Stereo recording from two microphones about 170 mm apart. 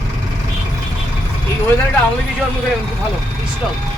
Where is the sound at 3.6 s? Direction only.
Centre (ahead or behind).